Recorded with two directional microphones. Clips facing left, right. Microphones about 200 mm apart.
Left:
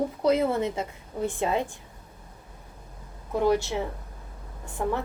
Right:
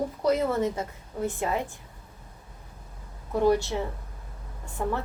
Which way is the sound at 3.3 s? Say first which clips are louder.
Right 1 dB; 20° left (ahead or behind).